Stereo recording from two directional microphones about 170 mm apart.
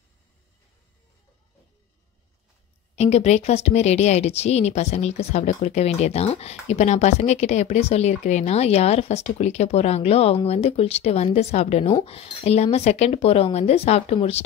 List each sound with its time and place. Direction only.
3.0 s speech: 40° left (ahead or behind)